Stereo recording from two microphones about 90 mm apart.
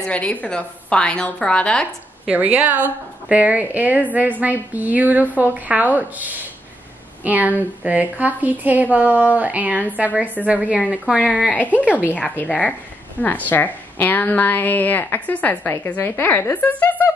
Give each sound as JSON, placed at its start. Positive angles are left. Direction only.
{"t": 0.0, "sound": "a woman's voice", "side_deg": 15}
{"t": 2.2, "sound": "a woman's voice", "side_deg": -15}
{"t": 10.9, "sound": "speech", "side_deg": -5}
{"t": 11.3, "sound": "a woman's voice", "side_deg": 15}
{"t": 11.8, "sound": "a woman's voice", "side_deg": -15}
{"t": 12.1, "sound": "a woman's voice", "side_deg": 20}